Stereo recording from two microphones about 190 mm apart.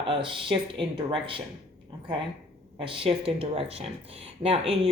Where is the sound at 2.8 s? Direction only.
25° right (ahead or behind).